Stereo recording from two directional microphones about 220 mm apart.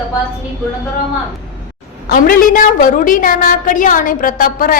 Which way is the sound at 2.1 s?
40° left (ahead or behind).